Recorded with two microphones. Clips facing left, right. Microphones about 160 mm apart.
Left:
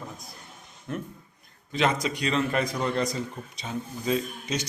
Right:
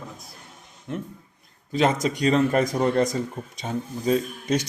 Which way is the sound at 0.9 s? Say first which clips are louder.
Right 2 dB; 25° right (ahead or behind).